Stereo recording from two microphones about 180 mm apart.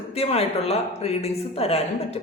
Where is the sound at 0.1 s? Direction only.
35° left (ahead or behind).